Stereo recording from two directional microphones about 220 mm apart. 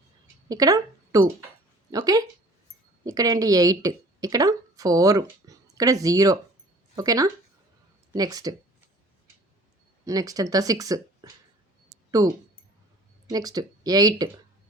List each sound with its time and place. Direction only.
0.4 s speech: 15° right (ahead or behind)
10.1 s speech: 15° right (ahead or behind)